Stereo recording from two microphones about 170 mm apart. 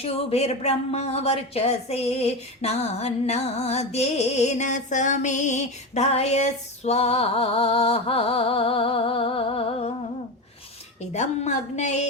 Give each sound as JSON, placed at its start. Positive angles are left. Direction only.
{"t": 0.0, "sound": "a woman's voice", "side_deg": 40}
{"t": 11.1, "sound": "speech", "side_deg": 45}